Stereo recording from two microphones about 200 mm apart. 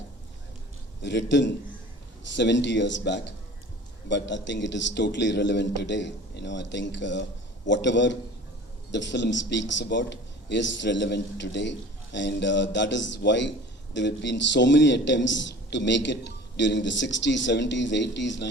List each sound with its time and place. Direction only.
1.0 s a man's voice: 60° left (ahead or behind)